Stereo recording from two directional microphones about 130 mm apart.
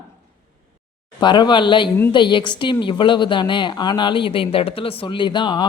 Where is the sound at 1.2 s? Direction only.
35° left (ahead or behind).